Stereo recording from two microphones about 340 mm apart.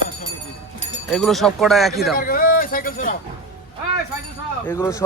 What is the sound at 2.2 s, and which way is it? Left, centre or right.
Speech, left.